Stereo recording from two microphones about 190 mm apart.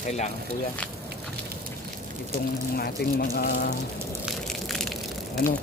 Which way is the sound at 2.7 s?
55° left (ahead or behind).